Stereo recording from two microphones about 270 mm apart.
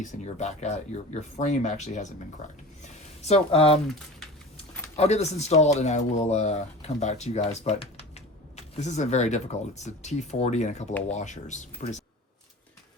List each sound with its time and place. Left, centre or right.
0.0 s speech: left
4.9 s speech: left